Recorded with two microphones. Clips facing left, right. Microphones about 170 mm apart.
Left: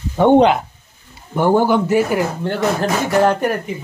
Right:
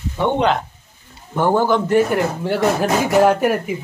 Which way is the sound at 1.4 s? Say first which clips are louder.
Left 2 dB; 10° left (ahead or behind).